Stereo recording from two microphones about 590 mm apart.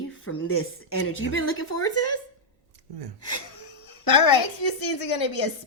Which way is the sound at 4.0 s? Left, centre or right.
Left.